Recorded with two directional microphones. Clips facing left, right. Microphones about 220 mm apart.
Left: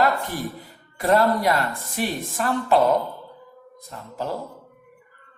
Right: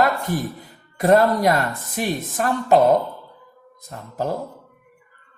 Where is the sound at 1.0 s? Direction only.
45° right (ahead or behind).